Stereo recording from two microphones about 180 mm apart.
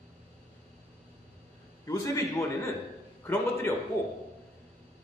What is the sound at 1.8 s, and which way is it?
A man's voice, 15° left (ahead or behind).